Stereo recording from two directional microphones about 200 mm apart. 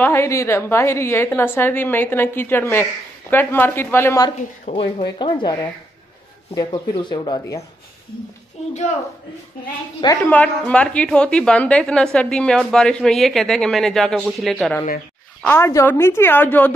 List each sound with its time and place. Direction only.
0.0 s a woman's voice: 10° left (ahead or behind)
4.6 s speech: 30° left (ahead or behind)
10.3 s a woman's voice: 5° left (ahead or behind)
15.4 s a woman's voice: 10° left (ahead or behind)